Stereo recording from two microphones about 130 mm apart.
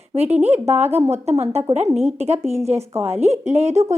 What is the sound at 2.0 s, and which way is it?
A woman's voice, 55° right (ahead or behind).